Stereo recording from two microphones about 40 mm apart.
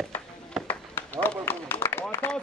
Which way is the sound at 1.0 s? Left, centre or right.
Left.